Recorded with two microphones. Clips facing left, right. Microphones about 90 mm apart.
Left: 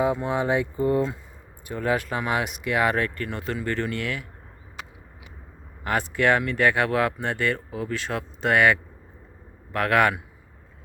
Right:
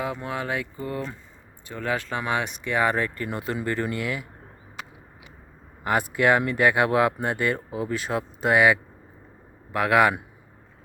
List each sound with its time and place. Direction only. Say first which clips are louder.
0.0 s speech: left 6 dB; 20° left (ahead or behind); by 4.3 s 10° right (ahead or behind)
5.8 s speech: right 1 dB; 10° right (ahead or behind)